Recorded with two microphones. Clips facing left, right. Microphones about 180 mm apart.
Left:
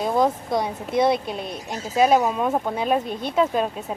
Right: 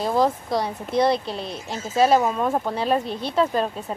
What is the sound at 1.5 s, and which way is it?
Speech, 15° left (ahead or behind).